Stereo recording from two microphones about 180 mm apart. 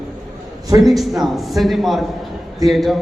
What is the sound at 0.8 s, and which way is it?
A man's voice, centre (ahead or behind).